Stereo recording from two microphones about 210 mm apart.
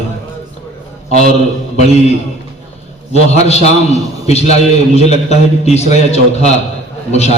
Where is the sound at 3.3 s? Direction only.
30° left (ahead or behind).